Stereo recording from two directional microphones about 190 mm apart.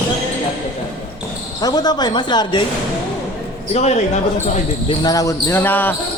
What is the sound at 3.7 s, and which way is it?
Speech, 35° left (ahead or behind).